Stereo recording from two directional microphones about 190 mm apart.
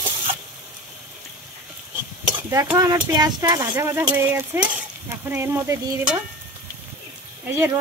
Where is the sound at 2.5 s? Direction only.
15° right (ahead or behind).